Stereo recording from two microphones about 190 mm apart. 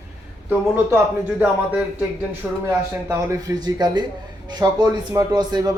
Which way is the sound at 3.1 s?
20° right (ahead or behind).